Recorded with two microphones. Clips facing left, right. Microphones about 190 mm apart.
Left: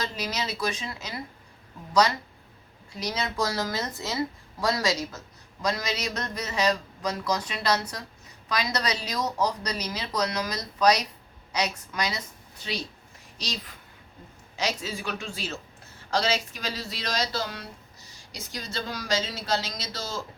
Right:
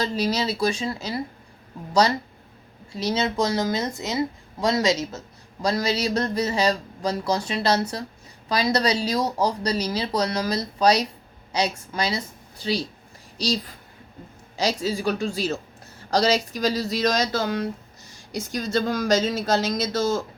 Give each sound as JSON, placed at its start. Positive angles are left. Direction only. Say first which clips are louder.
{"t": 0.0, "sound": "a woman's voice", "louder": "right 8 dB", "side_deg": -30}